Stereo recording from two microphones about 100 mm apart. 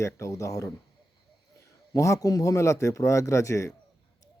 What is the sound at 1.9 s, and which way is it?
Speech, 30° left (ahead or behind).